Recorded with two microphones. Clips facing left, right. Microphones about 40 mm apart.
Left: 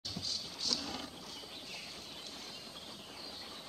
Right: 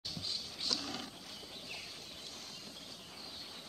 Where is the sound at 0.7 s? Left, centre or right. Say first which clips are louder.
Even; centre.